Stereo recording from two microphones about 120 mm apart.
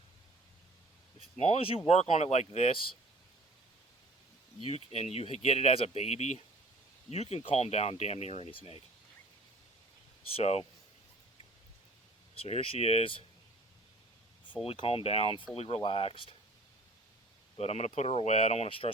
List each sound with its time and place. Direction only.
1.4 s speech: 60° left (ahead or behind)
4.6 s speech: 60° left (ahead or behind)
7.1 s speech: 60° left (ahead or behind)
10.3 s speech: 60° left (ahead or behind)
12.3 s speech: 55° left (ahead or behind)
14.5 s speech: 50° left (ahead or behind)
17.6 s speech: 65° left (ahead or behind)